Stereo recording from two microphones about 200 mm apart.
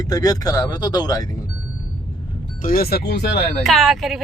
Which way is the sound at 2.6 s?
45° left (ahead or behind).